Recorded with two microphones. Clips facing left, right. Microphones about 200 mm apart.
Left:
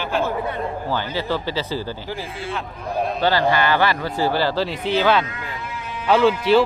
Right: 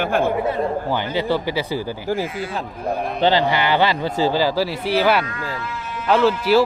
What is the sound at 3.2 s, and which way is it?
Speech, 20° right (ahead or behind).